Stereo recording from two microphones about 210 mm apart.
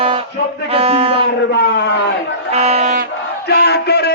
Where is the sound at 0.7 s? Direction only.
30° right (ahead or behind).